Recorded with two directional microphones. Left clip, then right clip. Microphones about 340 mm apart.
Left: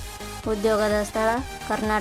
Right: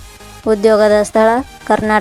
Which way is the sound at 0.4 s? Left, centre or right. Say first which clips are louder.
Right 12 dB; centre.